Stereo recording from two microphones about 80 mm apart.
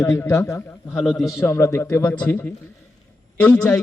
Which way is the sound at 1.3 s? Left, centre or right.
Left.